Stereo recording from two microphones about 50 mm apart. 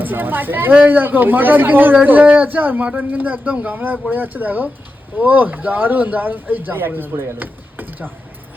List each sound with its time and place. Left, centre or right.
0.0 s a man's voice: right